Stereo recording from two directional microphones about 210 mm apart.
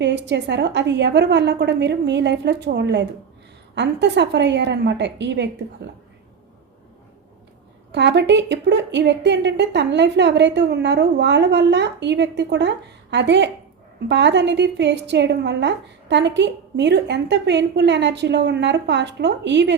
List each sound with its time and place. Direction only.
0.0 s a woman's voice: 55° right (ahead or behind)
7.9 s a woman's voice: 55° right (ahead or behind)